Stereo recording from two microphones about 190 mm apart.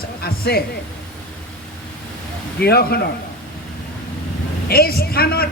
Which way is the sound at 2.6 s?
55° left (ahead or behind).